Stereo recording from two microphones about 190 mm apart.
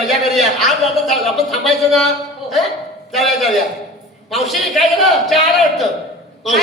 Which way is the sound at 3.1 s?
Centre (ahead or behind).